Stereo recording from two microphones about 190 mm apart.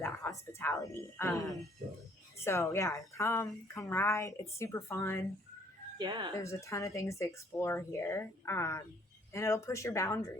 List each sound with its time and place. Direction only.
0.0 s speech: 15° left (ahead or behind)
6.0 s speech: 25° right (ahead or behind)
6.3 s speech: 15° left (ahead or behind)